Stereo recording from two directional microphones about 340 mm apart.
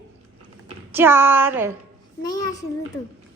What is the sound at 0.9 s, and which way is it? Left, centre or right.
Speech, centre.